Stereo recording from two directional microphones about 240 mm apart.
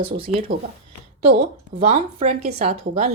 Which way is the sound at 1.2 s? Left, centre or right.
Right.